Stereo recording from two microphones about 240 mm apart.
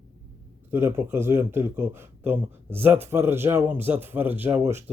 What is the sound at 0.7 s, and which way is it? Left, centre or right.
Speech, centre.